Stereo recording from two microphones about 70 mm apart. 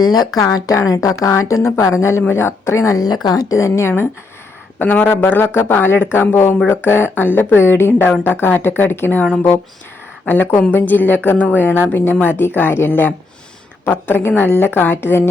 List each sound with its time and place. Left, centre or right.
0.0 s speech: left
0.3 s speech: centre
0.5 s a woman's voice: left
3.2 s speech: left
4.8 s speech: left
10.2 s speech: left